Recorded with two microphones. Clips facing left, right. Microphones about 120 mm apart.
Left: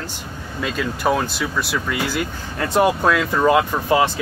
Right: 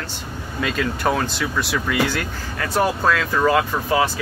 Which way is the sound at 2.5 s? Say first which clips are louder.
Left 3 dB; 20° left (ahead or behind).